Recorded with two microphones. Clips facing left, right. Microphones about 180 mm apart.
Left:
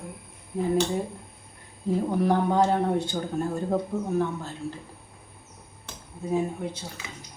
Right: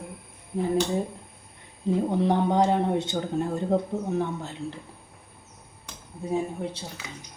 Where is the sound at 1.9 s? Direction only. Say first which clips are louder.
Even; 20° right (ahead or behind).